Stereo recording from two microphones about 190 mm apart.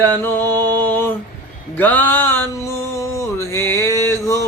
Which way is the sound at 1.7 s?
10° left (ahead or behind).